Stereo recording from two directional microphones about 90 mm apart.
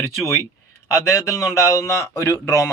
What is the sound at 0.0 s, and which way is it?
Speech, 35° left (ahead or behind).